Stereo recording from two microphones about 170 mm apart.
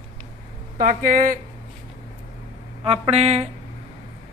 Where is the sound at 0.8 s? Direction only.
50° right (ahead or behind).